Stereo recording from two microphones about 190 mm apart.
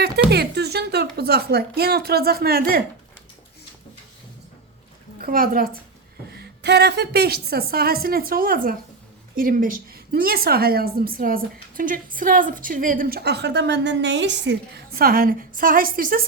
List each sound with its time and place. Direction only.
0.0 s a woman's voice: 60° right (ahead or behind)
5.2 s a woman's voice: 50° right (ahead or behind)
6.2 s a woman's voice: 60° right (ahead or behind)